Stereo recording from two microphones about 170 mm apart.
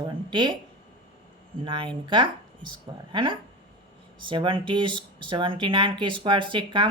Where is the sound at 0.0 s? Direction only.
25° right (ahead or behind).